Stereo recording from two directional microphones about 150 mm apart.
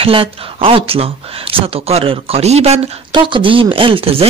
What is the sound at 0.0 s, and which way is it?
Speech, 40° right (ahead or behind).